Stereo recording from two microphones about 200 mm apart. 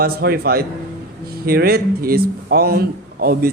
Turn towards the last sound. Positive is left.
turn(degrees=-50)  # may be behind; listen again after turning